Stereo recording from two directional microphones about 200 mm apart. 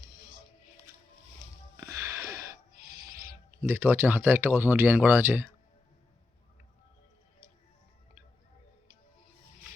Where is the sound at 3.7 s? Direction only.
10° right (ahead or behind).